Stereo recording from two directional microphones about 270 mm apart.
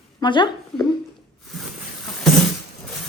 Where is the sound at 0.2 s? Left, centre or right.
Centre.